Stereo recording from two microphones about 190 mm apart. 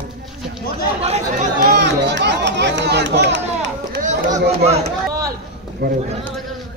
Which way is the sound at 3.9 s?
45° right (ahead or behind).